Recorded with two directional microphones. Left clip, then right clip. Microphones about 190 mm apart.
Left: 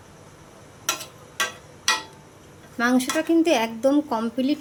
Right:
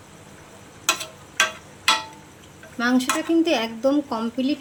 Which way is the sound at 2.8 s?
5° left (ahead or behind).